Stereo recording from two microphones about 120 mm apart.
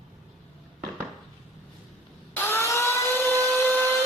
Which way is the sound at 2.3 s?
20° left (ahead or behind).